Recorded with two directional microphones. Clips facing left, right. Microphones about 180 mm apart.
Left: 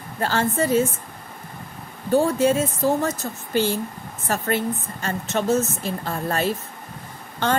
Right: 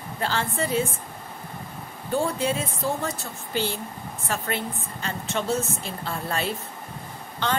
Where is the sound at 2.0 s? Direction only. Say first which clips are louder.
Left 7 dB; 45° left (ahead or behind).